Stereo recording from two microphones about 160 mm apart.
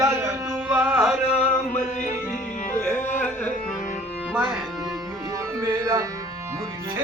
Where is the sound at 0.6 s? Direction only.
5° right (ahead or behind).